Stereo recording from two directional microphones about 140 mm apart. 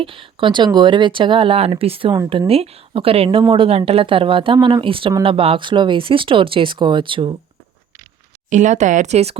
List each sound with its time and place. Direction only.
0.0 s speech: 40° right (ahead or behind)
8.4 s speech: 60° right (ahead or behind)